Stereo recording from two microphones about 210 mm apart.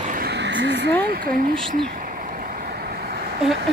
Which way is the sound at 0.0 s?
45° right (ahead or behind).